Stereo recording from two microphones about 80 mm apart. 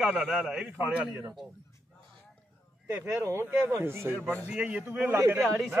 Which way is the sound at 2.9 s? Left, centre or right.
Right.